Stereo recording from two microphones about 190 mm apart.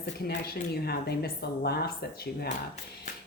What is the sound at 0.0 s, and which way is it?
A woman's voice, 55° left (ahead or behind).